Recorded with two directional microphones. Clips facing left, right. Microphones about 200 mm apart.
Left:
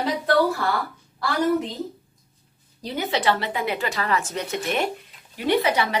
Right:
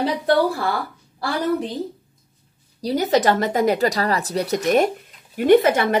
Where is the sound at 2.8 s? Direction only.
40° right (ahead or behind).